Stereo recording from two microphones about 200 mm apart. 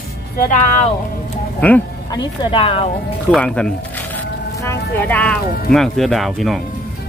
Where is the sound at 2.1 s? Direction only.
20° left (ahead or behind).